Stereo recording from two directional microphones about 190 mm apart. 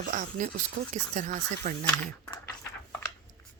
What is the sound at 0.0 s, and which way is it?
Speech, 45° right (ahead or behind).